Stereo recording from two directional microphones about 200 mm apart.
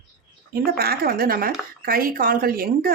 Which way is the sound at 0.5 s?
50° right (ahead or behind).